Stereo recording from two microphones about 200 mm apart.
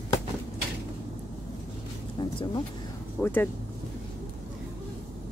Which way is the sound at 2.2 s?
20° left (ahead or behind).